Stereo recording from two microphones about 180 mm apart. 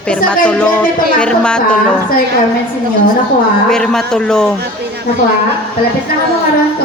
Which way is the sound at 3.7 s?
5° left (ahead or behind).